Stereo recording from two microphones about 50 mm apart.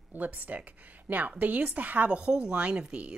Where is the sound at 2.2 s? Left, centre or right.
Centre.